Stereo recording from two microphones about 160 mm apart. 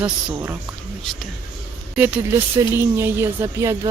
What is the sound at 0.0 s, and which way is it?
Speech, 5° right (ahead or behind).